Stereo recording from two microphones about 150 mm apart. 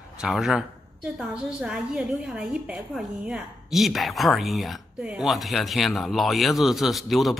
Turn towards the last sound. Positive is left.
turn(degrees=0)  # may be behind; listen again after turning